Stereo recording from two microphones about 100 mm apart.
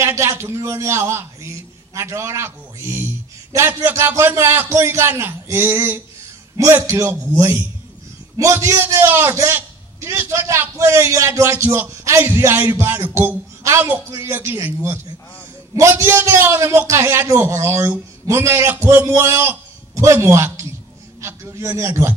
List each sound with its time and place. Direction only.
0.0 s a man's voice: 30° right (ahead or behind)